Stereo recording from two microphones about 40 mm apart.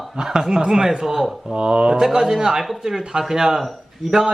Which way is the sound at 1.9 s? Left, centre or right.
Centre.